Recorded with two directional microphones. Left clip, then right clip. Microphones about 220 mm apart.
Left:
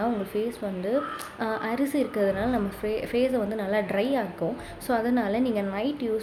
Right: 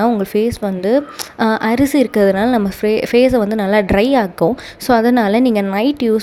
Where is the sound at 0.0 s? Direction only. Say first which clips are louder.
Right 13 dB; 45° right (ahead or behind).